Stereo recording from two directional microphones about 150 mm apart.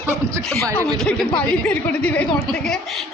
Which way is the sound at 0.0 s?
20° right (ahead or behind).